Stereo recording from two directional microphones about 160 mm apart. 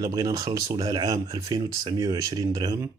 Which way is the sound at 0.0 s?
25° right (ahead or behind).